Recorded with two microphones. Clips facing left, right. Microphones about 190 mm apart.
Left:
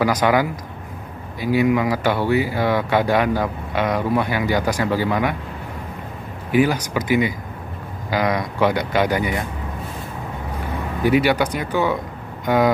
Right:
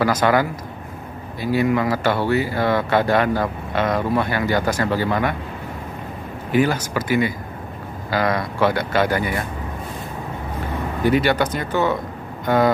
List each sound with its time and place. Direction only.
0.0 s speech: 15° left (ahead or behind)
6.5 s speech: 10° left (ahead or behind)
11.1 s speech: 10° left (ahead or behind)